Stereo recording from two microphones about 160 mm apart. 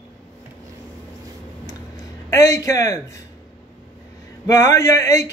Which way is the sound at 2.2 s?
20° left (ahead or behind).